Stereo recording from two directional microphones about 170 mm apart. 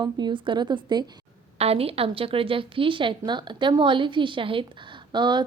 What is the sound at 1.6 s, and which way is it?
Speech, 35° right (ahead or behind).